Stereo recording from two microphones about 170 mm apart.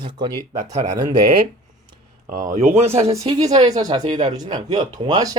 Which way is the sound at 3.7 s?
25° right (ahead or behind).